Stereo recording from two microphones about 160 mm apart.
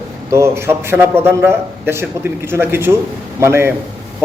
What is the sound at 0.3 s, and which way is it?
A man's voice, 15° right (ahead or behind).